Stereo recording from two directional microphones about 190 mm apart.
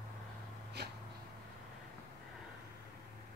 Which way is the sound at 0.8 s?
60° right (ahead or behind).